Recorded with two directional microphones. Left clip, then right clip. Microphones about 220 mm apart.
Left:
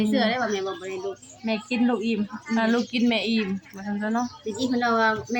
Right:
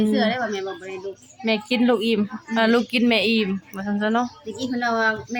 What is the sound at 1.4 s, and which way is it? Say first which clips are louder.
A woman's voice: right 5 dB; 30° right (ahead or behind).